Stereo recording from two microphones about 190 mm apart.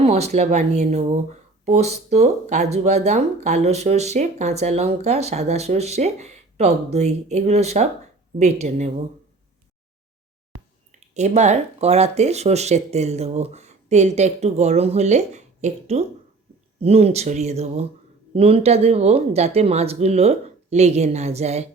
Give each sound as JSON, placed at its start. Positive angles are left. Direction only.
{"t": 0.0, "sound": "speech", "side_deg": -35}
{"t": 11.1, "sound": "speech", "side_deg": -40}